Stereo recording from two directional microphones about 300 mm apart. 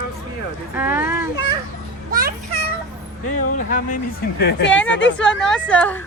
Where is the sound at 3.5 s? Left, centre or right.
Left.